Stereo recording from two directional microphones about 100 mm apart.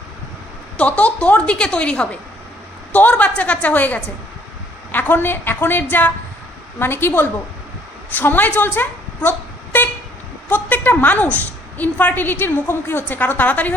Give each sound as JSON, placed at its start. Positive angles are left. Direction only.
{"t": 0.8, "sound": "a woman's voice", "side_deg": 15}
{"t": 10.5, "sound": "a woman's voice", "side_deg": 20}